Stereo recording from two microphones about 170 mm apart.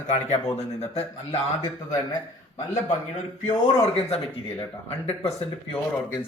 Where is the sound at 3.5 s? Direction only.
35° left (ahead or behind).